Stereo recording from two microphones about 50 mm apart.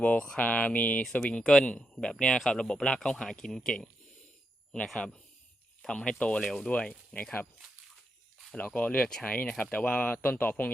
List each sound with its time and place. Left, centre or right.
0.0 s speech: left
1.2 s speech: centre
4.9 s speech: centre
8.5 s speech: left